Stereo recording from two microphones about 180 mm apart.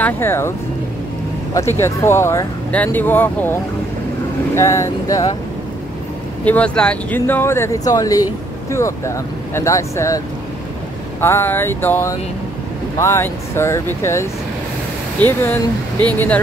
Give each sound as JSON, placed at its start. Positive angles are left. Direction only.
{"t": 0.0, "sound": "speech", "side_deg": 15}
{"t": 4.6, "sound": "speech", "side_deg": 15}
{"t": 6.4, "sound": "speech", "side_deg": 5}